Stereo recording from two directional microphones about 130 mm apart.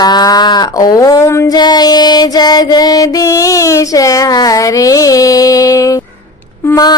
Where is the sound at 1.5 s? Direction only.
30° left (ahead or behind).